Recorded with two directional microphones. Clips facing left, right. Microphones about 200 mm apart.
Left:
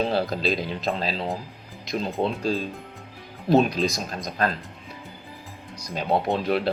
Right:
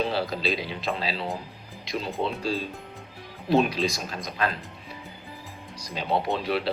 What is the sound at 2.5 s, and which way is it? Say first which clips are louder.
Speech: left 3 dB; 45° left (ahead or behind).